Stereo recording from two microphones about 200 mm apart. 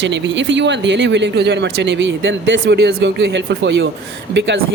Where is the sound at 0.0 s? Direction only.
65° right (ahead or behind).